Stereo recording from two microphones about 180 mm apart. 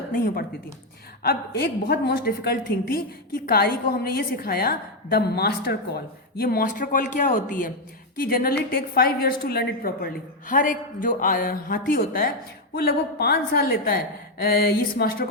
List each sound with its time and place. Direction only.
0.1 s a man's voice: 50° left (ahead or behind)
1.2 s a woman's voice: 60° left (ahead or behind)